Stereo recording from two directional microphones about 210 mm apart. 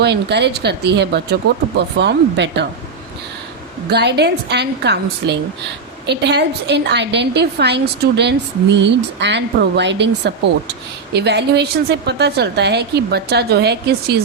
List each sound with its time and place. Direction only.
0.0 s a woman's voice: 55° right (ahead or behind)
3.8 s a woman's voice: 50° right (ahead or behind)